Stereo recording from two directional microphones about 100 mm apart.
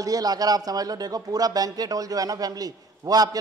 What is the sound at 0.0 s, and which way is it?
Speech, 40° right (ahead or behind).